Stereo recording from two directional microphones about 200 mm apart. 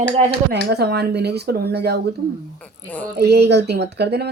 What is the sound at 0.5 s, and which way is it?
Speech, 55° right (ahead or behind).